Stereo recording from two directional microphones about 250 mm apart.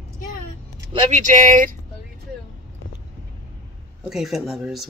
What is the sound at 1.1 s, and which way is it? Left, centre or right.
Speech, right.